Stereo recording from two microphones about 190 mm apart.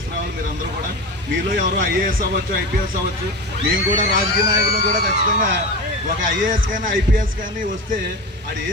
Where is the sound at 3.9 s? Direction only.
45° right (ahead or behind).